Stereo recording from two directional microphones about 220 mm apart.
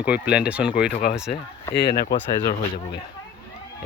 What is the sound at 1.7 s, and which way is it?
Speech, 10° left (ahead or behind).